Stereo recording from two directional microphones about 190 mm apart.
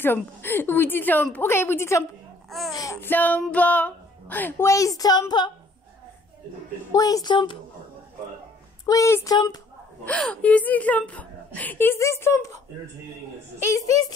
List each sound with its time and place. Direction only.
0.0 s speech: 10° left (ahead or behind)
6.9 s speech: 20° left (ahead or behind)
8.8 s speech: 15° left (ahead or behind)
10.0 s speech: 5° left (ahead or behind)
13.7 s speech: 15° left (ahead or behind)